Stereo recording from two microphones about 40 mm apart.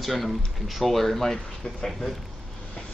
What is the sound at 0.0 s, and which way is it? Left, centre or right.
Speech, centre.